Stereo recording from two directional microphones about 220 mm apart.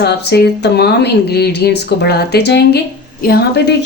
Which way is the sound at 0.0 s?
50° left (ahead or behind).